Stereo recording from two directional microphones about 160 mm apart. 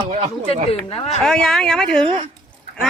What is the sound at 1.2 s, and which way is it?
Speech, 5° left (ahead or behind).